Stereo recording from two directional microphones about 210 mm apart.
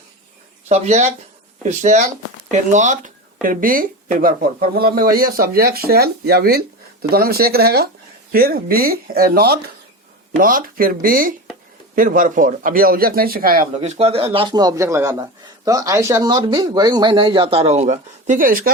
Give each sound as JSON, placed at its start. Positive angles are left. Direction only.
{"t": 0.7, "sound": "speech", "side_deg": -30}